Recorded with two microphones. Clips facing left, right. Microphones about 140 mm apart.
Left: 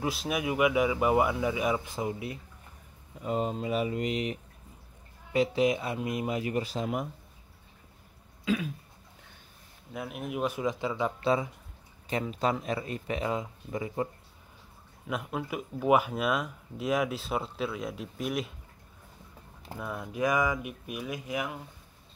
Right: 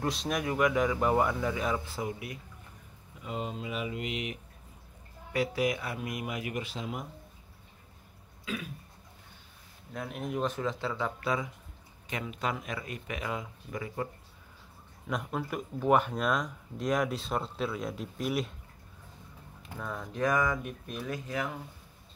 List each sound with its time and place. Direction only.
0.0 s speech: 5° left (ahead or behind); by 2.3 s 25° left (ahead or behind)
3.2 s speech: 40° left (ahead or behind)
5.3 s a man's voice: 25° left (ahead or behind)
9.9 s speech: 5° left (ahead or behind); by 14.0 s 25° left (ahead or behind)
15.0 s speech: 5° left (ahead or behind)
19.8 s speech: 10° left (ahead or behind)